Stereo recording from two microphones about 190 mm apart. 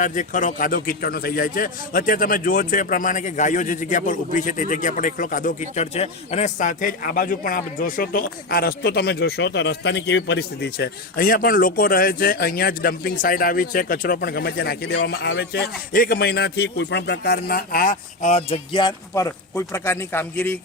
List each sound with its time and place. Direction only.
0.0 s a man's voice: 40° left (ahead or behind); by 20.6 s 5° left (ahead or behind)